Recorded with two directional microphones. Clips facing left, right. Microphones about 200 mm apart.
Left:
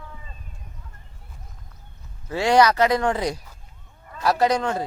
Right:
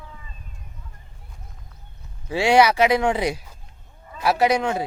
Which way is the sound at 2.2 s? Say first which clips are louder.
Right 1 dB; 10° right (ahead or behind).